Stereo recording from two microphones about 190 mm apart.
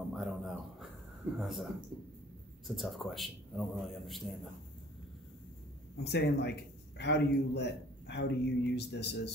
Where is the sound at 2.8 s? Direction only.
Centre (ahead or behind).